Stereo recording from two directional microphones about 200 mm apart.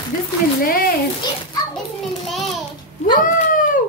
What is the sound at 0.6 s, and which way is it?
Speech, 45° left (ahead or behind).